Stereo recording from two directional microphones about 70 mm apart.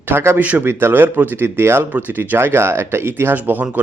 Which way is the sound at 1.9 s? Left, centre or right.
Right.